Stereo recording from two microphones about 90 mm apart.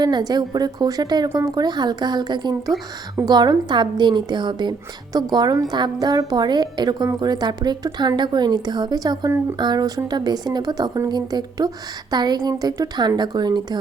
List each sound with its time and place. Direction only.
0.0 s a woman's voice: 50° right (ahead or behind)